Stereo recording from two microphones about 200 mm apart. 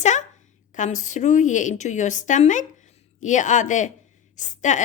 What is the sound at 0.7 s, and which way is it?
A woman's voice, 40° left (ahead or behind).